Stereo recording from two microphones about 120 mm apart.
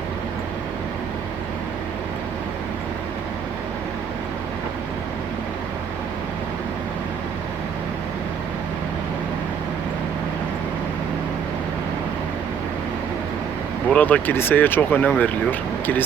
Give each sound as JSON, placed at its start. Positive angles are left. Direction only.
{"t": 13.9, "sound": "speech", "side_deg": 15}